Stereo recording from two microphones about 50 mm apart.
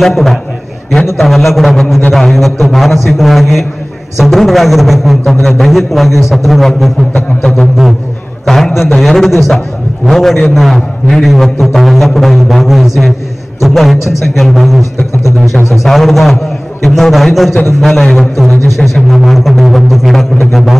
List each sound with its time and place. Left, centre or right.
0.0 s a man's voice: centre
8.5 s a man's voice: centre
13.9 s speech: left
14.2 s a man's voice: centre
18.8 s speech: centre
19.1 s a man's voice: centre